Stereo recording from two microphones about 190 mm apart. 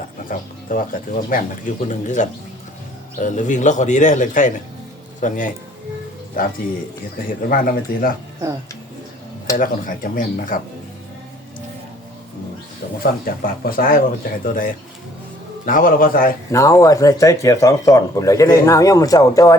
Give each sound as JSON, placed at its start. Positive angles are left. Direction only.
{"t": 0.3, "sound": "speech", "side_deg": 45}
{"t": 7.4, "sound": "speech", "side_deg": 50}
{"t": 9.6, "sound": "speech", "side_deg": 45}
{"t": 13.0, "sound": "speech", "side_deg": 50}
{"t": 16.5, "sound": "speech", "side_deg": 15}